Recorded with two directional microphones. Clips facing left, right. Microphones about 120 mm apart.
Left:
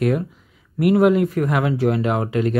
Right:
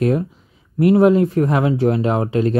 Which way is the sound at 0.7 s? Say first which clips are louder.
Right 3 dB; 30° right (ahead or behind).